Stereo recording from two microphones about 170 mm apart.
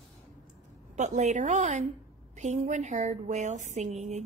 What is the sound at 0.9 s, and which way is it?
Speech, 45° right (ahead or behind).